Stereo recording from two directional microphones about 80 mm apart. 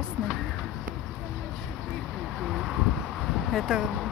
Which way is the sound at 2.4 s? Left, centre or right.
Centre.